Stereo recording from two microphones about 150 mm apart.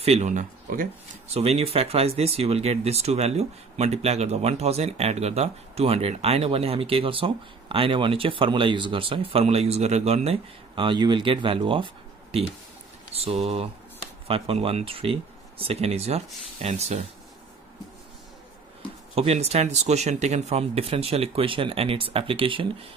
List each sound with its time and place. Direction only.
0.0 s speech: 45° right (ahead or behind); by 0.8 s 65° right (ahead or behind)
1.3 s speech: 45° right (ahead or behind)
19.1 s speech: 45° right (ahead or behind)